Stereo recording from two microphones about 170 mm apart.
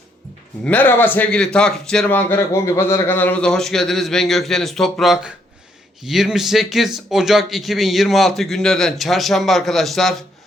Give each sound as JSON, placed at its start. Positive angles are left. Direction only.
{"t": 0.6, "sound": "speech", "side_deg": 10}